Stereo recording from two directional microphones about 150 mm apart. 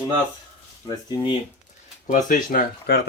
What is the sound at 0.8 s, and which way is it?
Speech, 25° left (ahead or behind).